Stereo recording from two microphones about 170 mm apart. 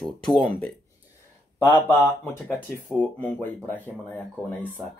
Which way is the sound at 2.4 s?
10° left (ahead or behind).